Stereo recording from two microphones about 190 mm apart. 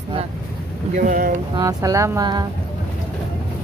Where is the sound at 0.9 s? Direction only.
45° right (ahead or behind).